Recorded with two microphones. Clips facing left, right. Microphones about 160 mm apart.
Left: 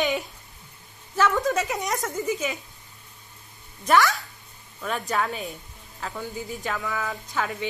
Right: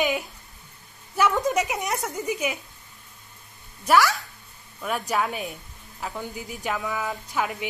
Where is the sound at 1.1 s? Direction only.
15° right (ahead or behind).